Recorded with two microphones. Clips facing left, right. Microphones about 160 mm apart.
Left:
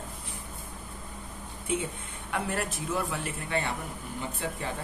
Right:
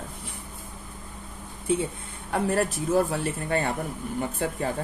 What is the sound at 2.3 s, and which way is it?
A man's voice, 35° right (ahead or behind).